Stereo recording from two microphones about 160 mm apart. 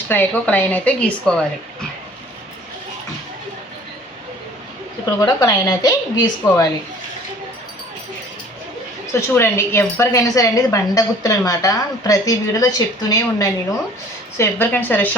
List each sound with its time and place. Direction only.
0.1 s a woman's voice: 10° left (ahead or behind)
5.2 s a woman's voice: 25° left (ahead or behind)
9.3 s a woman's voice: 15° left (ahead or behind)